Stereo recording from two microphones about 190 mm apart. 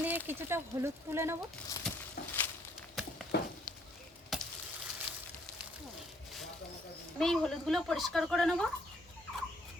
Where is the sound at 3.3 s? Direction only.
60° left (ahead or behind).